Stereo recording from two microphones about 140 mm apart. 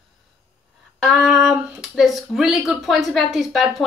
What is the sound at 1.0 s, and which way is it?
Speech, centre (ahead or behind).